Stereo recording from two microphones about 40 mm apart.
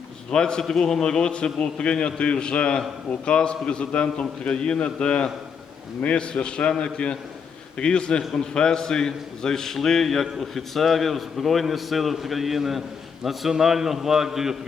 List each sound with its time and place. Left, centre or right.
0.3 s a man's voice: centre